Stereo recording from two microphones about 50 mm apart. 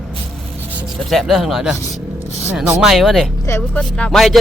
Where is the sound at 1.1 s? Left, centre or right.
Centre.